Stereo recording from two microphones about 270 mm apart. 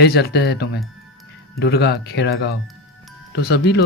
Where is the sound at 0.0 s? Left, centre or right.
Left.